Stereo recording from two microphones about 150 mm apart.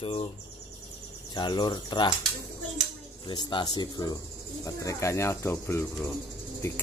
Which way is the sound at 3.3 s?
30° left (ahead or behind).